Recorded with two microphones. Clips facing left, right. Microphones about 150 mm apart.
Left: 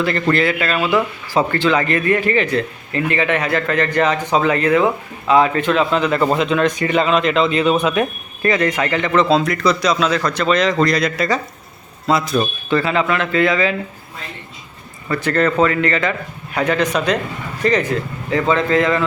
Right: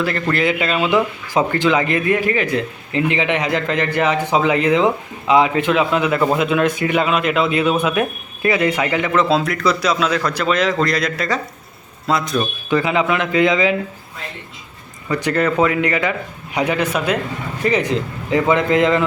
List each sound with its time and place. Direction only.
0.0 s a man's voice: 5° right (ahead or behind)
0.4 s a man's voice: 20° right (ahead or behind); by 12.5 s centre (ahead or behind)
12.7 s a man's voice: 15° right (ahead or behind)
15.1 s a man's voice: 15° right (ahead or behind)